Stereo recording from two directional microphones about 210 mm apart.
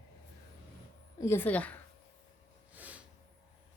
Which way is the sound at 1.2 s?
10° left (ahead or behind).